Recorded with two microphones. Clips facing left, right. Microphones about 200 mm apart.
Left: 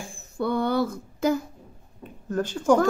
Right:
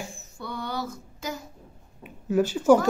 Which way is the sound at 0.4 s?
55° left (ahead or behind).